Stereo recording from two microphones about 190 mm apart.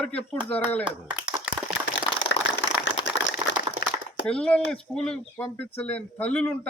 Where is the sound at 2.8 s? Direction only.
70° left (ahead or behind).